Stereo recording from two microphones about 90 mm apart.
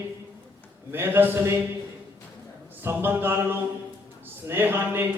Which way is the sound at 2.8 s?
25° right (ahead or behind).